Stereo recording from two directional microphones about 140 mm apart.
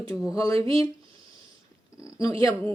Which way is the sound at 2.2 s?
25° left (ahead or behind).